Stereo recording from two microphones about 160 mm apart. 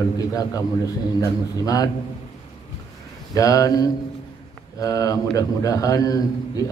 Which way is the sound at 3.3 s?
20° left (ahead or behind).